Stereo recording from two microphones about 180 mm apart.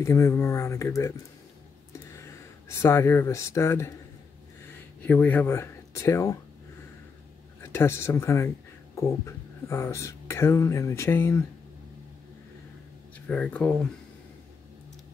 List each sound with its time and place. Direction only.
0.0 s speech: 15° left (ahead or behind)
1.9 s a sound: 15° left (ahead or behind)
4.6 s speech: 10° left (ahead or behind)
7.6 s speech: 15° left (ahead or behind)
13.3 s speech: 5° left (ahead or behind)